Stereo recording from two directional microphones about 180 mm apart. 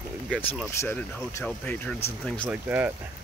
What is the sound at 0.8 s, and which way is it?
Speech, 10° left (ahead or behind).